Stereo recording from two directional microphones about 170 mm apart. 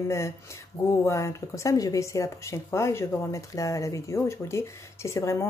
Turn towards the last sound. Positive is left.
turn(degrees=15)  # may be behind; listen again after turning